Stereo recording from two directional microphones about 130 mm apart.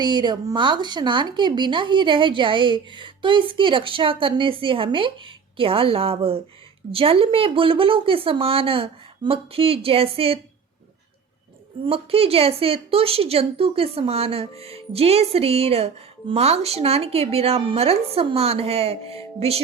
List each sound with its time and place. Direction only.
0.0 s speech: 35° right (ahead or behind)
11.9 s speech: 50° right (ahead or behind)